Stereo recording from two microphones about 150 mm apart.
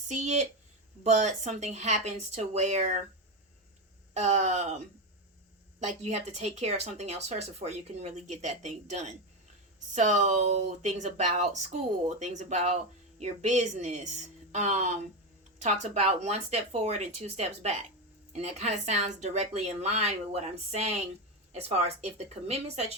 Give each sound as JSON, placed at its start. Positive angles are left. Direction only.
{"t": 0.1, "sound": "speech", "side_deg": -50}
{"t": 4.1, "sound": "speech", "side_deg": -50}
{"t": 5.8, "sound": "a woman's voice", "side_deg": -50}